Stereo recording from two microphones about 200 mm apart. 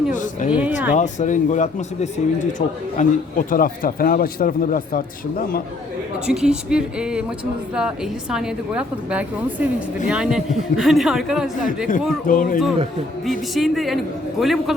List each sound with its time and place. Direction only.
0.1 s speech: 40° left (ahead or behind)
0.5 s speech: 5° right (ahead or behind)
0.9 s speech: 35° left (ahead or behind)
6.2 s a woman's voice: 5° right (ahead or behind)
12.3 s speech: 45° left (ahead or behind)
13.5 s a woman's voice: centre (ahead or behind)